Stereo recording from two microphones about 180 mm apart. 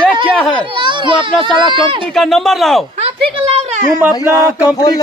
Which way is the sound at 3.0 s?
35° right (ahead or behind).